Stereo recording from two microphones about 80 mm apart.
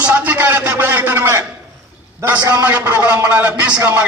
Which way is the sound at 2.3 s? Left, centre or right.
Right.